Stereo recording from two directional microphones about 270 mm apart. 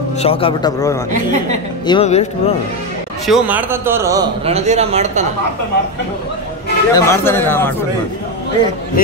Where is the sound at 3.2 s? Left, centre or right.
Centre.